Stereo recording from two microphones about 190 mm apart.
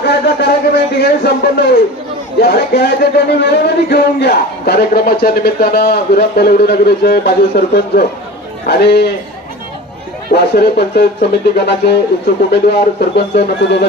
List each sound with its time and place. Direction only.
0.0 s speech: 60° left (ahead or behind)
10.3 s speech: 60° left (ahead or behind)